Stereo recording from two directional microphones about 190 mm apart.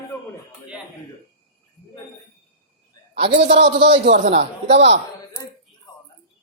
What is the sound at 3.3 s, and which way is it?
Speech, 60° right (ahead or behind).